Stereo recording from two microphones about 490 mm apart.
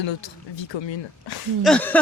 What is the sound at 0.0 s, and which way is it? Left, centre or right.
Speech, left.